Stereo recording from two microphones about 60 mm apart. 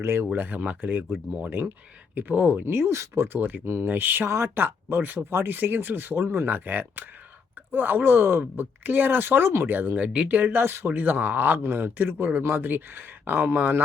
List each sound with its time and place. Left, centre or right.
0.0 s speech: right
0.3 s speech: right
2.6 s speech: right
3.2 s speech: right
4.3 s speech: right
4.5 s speech: right
10.0 s speech: centre
10.2 s speech: right